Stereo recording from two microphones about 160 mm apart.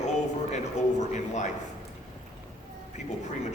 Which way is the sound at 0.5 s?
45° left (ahead or behind).